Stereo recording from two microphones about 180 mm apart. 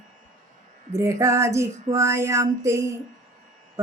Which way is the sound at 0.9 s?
15° right (ahead or behind).